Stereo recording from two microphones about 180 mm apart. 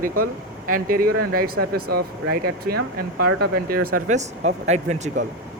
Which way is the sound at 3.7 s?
40° right (ahead or behind).